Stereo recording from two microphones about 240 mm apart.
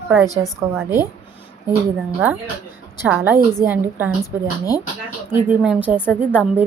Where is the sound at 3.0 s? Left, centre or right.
Centre.